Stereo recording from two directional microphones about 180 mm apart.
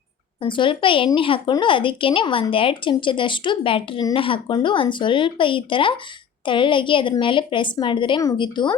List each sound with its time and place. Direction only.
0.4 s a woman's voice: 25° left (ahead or behind)